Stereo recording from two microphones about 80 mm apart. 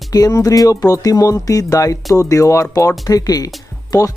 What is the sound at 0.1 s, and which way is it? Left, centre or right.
Speech, left.